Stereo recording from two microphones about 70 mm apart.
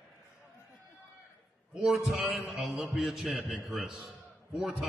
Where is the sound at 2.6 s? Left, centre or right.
Centre.